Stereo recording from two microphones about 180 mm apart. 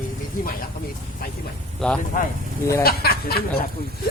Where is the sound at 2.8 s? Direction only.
60° left (ahead or behind).